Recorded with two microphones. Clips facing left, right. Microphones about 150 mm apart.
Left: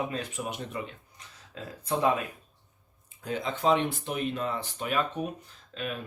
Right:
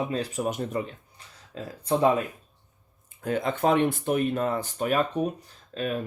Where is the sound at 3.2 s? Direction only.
55° right (ahead or behind).